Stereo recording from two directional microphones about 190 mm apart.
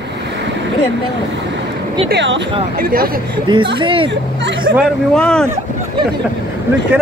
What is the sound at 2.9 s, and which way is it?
Speech, 50° right (ahead or behind).